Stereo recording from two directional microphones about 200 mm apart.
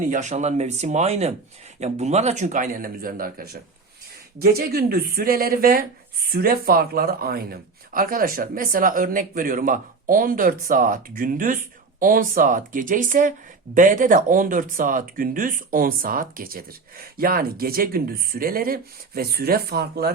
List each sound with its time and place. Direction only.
0.1 s speech: 35° right (ahead or behind)